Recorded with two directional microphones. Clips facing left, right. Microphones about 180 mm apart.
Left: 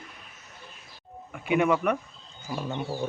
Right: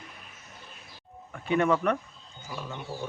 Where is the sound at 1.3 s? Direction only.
10° left (ahead or behind).